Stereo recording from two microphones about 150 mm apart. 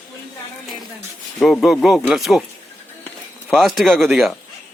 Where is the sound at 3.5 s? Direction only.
Centre (ahead or behind).